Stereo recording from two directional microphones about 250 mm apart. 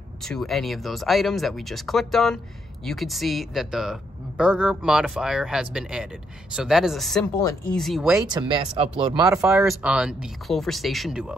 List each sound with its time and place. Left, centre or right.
0.2 s speech: centre
8.3 s speech: centre